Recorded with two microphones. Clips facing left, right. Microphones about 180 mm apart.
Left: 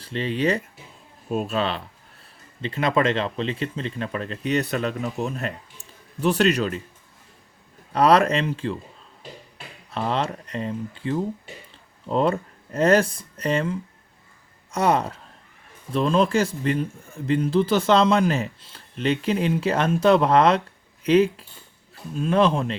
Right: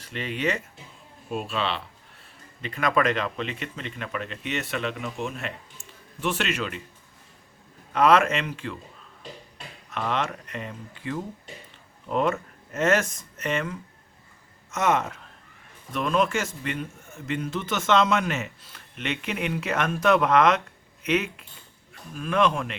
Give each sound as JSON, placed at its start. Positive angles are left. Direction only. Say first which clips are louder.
{"t": 0.0, "sound": "a man's voice", "louder": "left 5 dB", "side_deg": 30}
{"t": 2.6, "sound": "a man's voice", "louder": "left 2 dB", "side_deg": 30}
{"t": 7.9, "sound": "a man's voice", "louder": "left 2 dB", "side_deg": 35}
{"t": 9.9, "sound": "a man's voice", "louder": "left 3 dB", "side_deg": 30}